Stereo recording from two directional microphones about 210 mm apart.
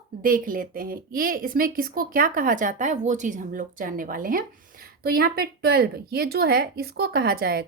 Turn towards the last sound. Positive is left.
turn(degrees=-45)  # may be behind; listen again after turning